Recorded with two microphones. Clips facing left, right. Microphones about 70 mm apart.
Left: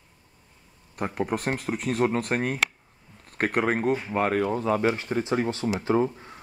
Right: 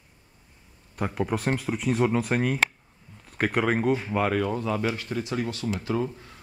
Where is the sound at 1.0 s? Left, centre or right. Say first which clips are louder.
Even; centre.